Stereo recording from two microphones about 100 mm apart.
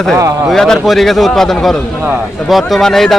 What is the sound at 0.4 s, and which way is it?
A man's voice, 5° left (ahead or behind).